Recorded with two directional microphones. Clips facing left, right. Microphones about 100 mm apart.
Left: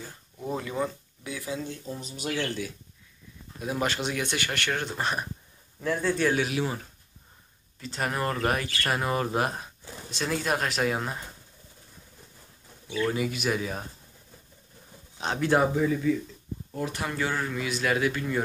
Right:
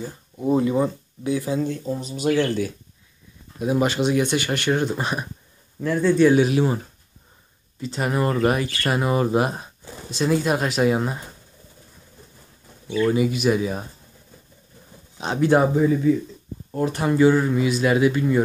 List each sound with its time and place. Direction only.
0.4 s speech: 20° right (ahead or behind)
1.6 s speech: 60° right (ahead or behind)
2.3 s speech: 45° right (ahead or behind)
3.6 s speech: 15° right (ahead or behind)
5.8 s speech: centre (ahead or behind)
6.3 s speech: 30° right (ahead or behind)
7.8 s speech: 10° right (ahead or behind)
13.0 s speech: 10° right (ahead or behind)
15.1 s speech: 15° right (ahead or behind)
15.6 s speech: 30° right (ahead or behind)
17.0 s speech: 20° right (ahead or behind)